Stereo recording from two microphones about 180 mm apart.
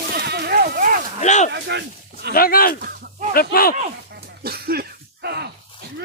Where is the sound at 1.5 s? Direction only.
70° right (ahead or behind).